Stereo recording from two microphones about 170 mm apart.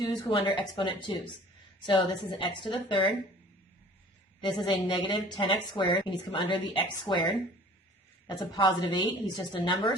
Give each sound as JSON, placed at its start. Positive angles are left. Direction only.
{"t": 0.0, "sound": "a woman's voice", "side_deg": 25}
{"t": 4.4, "sound": "a woman's voice", "side_deg": 30}
{"t": 8.3, "sound": "a woman's voice", "side_deg": 25}